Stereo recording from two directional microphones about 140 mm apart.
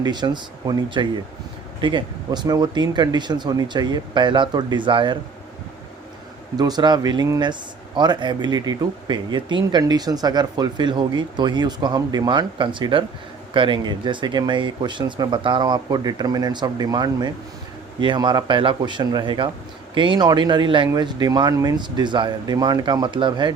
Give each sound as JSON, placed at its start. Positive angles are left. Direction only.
{"t": 0.0, "sound": "speech", "side_deg": -30}
{"t": 6.6, "sound": "speech", "side_deg": -30}